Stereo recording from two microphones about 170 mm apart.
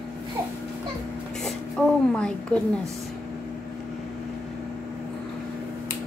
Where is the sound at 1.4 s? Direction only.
5° left (ahead or behind).